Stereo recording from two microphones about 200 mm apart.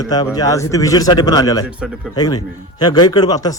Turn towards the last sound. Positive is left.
turn(degrees=20)  # may be behind; listen again after turning